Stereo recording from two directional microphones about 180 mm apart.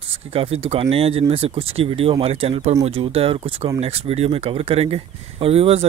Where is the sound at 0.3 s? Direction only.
30° right (ahead or behind).